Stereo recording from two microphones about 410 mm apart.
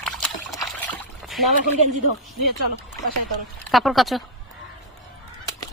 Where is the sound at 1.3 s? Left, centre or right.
Centre.